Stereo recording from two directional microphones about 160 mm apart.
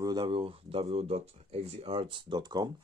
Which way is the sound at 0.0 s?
25° right (ahead or behind).